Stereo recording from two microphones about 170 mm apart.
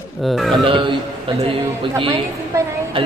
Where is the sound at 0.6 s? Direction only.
30° right (ahead or behind).